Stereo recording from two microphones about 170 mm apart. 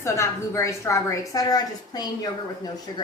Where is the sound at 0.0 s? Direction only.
15° left (ahead or behind).